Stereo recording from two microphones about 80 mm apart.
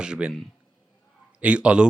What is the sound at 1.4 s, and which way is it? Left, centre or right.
Speech, centre.